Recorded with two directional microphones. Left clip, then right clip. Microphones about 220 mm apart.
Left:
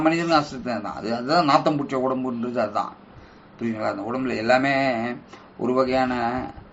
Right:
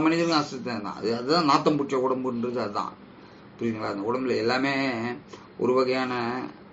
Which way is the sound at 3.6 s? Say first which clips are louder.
Left 3 dB; 20° left (ahead or behind).